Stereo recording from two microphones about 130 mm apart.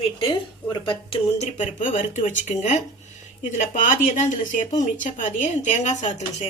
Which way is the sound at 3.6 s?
80° left.